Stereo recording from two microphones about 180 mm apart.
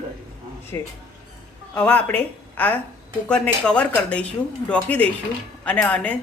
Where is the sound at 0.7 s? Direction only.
15° left (ahead or behind).